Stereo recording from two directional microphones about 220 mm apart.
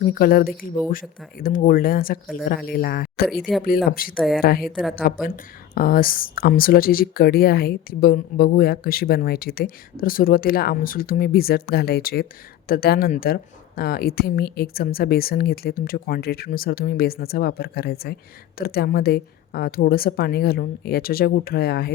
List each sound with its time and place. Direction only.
0.0 s speech: 40° left (ahead or behind)
4.1 s a woman's voice: centre (ahead or behind)
4.4 s speech: 45° left (ahead or behind)
4.6 s a woman's voice: centre (ahead or behind)
5.0 s speech: 40° left (ahead or behind)